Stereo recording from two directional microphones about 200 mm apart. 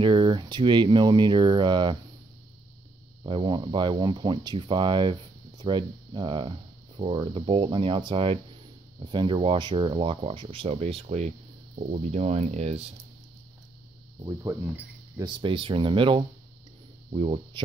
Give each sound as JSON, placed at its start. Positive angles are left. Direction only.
{"t": 0.0, "sound": "speech", "side_deg": -25}
{"t": 3.3, "sound": "speech", "side_deg": -25}
{"t": 14.2, "sound": "speech", "side_deg": -15}